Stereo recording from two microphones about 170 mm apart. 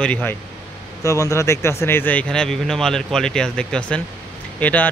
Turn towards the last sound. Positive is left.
turn(degrees=10)  # may be behind; listen again after turning